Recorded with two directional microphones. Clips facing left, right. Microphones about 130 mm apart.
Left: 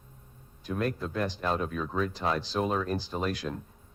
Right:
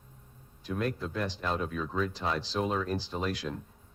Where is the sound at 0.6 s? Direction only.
45° left (ahead or behind).